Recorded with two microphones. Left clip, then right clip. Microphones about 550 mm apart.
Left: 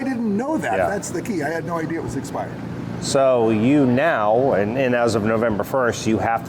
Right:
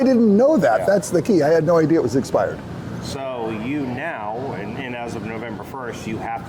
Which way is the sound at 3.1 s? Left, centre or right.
Left.